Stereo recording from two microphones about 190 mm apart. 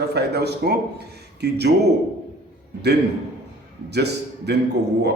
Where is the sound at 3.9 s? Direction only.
60° right (ahead or behind).